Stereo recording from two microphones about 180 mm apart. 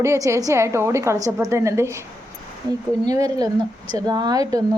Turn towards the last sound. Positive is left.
turn(degrees=-20)  # may be behind; listen again after turning